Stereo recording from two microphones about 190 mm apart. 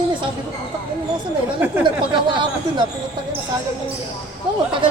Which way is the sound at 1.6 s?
10° right (ahead or behind).